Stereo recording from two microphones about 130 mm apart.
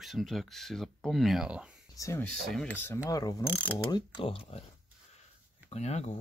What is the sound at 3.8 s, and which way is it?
Mechanisms, 35° left (ahead or behind).